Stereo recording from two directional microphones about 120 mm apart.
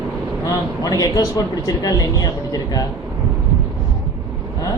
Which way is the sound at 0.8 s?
30° left (ahead or behind).